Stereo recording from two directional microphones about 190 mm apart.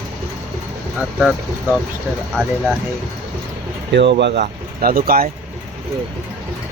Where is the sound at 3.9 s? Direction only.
65° right (ahead or behind).